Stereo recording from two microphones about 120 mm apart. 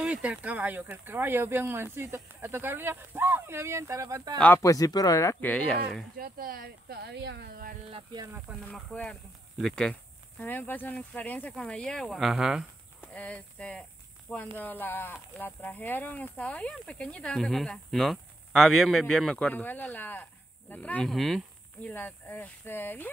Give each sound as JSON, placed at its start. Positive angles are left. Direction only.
{"t": 0.0, "sound": "speech", "side_deg": -10}
{"t": 4.6, "sound": "speech", "side_deg": 30}
{"t": 5.4, "sound": "speech", "side_deg": 5}
{"t": 8.5, "sound": "speech", "side_deg": -10}
{"t": 8.9, "sound": "speech", "side_deg": 10}
{"t": 10.4, "sound": "speech", "side_deg": 15}
{"t": 13.0, "sound": "speech", "side_deg": 10}
{"t": 21.1, "sound": "speech", "side_deg": 0}
{"t": 21.8, "sound": "speech", "side_deg": 15}